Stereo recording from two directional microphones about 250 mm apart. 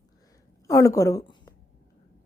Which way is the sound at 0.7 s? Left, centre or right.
Centre.